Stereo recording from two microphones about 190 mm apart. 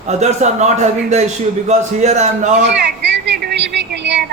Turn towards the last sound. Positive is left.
turn(degrees=-65)  # may be behind; listen again after turning